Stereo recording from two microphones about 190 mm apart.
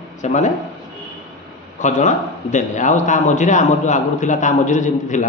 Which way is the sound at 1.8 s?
40° left (ahead or behind).